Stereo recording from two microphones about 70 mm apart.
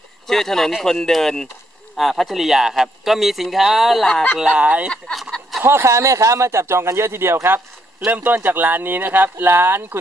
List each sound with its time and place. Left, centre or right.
0.3 s a man's voice: centre
4.4 s speech: centre
4.8 s a man's voice: centre
5.6 s speech: right
8.0 s speech: right